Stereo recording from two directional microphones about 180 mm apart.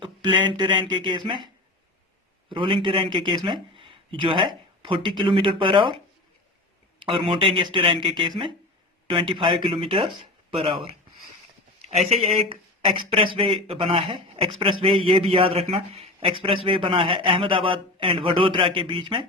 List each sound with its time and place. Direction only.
0.0 s a man's voice: 25° right (ahead or behind)
2.5 s a man's voice: 30° right (ahead or behind)
7.0 s a man's voice: 30° right (ahead or behind)
9.3 s a man's voice: 25° right (ahead or behind)